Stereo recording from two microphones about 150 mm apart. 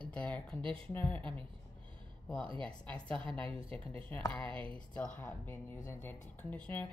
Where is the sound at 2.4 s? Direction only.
35° right (ahead or behind).